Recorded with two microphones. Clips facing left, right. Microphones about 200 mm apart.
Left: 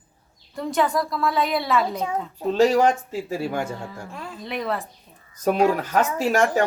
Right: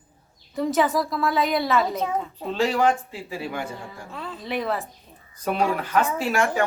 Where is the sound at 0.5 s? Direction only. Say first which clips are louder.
Right 1 dB; centre (ahead or behind).